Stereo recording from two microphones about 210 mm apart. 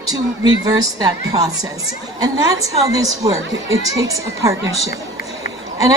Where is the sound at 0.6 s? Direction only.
15° right (ahead or behind).